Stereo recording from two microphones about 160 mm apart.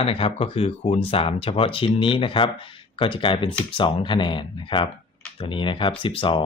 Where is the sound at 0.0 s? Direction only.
35° left (ahead or behind).